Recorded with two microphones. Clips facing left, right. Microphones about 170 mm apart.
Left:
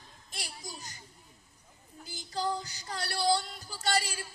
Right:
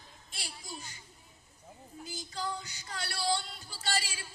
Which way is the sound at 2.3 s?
35° left (ahead or behind).